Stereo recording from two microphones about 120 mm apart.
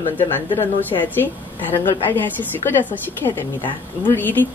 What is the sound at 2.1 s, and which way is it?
A woman's voice, 15° left (ahead or behind).